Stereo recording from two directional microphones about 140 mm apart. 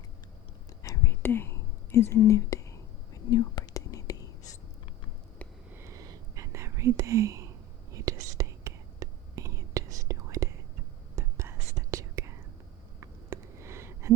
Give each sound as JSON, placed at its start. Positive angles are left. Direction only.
{"t": 0.8, "sound": "whispering", "side_deg": 20}
{"t": 5.7, "sound": "whispering", "side_deg": -20}
{"t": 13.0, "sound": "a sound", "side_deg": -20}